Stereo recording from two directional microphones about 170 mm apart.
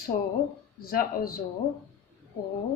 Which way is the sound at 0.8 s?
60° left (ahead or behind).